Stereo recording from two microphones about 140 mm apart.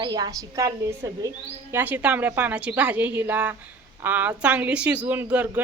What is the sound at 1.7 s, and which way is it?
A woman's voice, 15° right (ahead or behind).